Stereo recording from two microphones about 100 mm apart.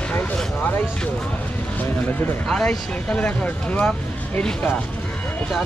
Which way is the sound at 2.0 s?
10° left (ahead or behind).